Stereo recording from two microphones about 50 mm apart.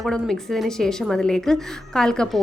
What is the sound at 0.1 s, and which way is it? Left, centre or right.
A woman's voice, centre.